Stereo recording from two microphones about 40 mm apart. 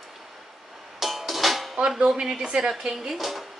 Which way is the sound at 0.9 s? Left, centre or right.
Centre.